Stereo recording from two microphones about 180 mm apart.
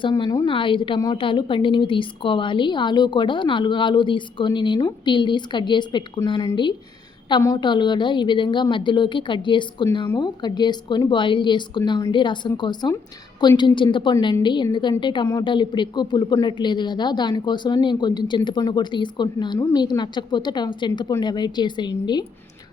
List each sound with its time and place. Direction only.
0.0 s a woman's voice: 25° left (ahead or behind)